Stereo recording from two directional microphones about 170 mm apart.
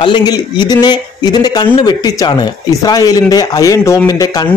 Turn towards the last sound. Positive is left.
turn(degrees=20)  # may be behind; listen again after turning